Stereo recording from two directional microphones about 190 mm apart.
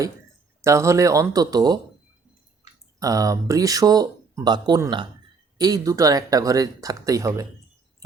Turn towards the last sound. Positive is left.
turn(degrees=-15)  # may be behind; listen again after turning